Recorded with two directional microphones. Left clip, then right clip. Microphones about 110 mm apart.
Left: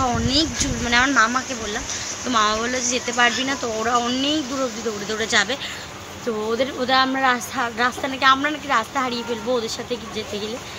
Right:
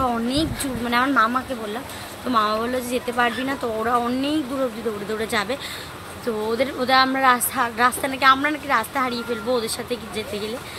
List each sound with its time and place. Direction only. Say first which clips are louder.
0.0 s a woman's voice: left 2 dB; 5° right (ahead or behind)